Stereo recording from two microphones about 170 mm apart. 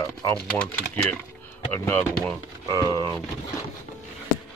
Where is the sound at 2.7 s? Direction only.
25° right (ahead or behind).